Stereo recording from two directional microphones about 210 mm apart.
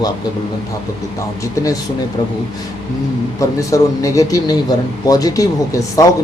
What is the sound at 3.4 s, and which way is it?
A man's voice, 15° left (ahead or behind).